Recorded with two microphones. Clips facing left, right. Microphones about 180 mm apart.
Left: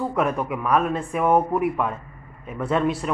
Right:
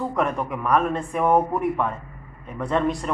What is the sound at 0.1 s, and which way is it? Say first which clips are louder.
Speech: left 1 dB; 5° left (ahead or behind).